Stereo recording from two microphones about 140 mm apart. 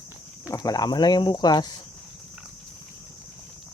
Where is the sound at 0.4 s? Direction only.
25° left (ahead or behind).